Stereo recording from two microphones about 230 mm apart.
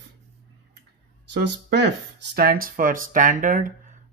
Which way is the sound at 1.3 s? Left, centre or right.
Right.